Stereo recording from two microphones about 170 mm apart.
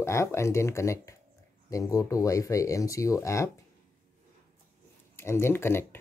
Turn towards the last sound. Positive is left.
turn(degrees=15)  # may be behind; listen again after turning